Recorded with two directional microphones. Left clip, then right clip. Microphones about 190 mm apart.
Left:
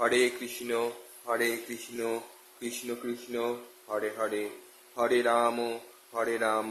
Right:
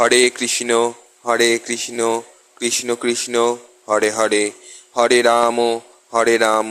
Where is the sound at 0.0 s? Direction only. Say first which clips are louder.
Right 12 dB; 50° right (ahead or behind).